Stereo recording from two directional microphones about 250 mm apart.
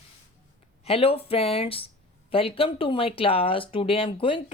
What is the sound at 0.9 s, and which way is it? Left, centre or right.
Speech, left.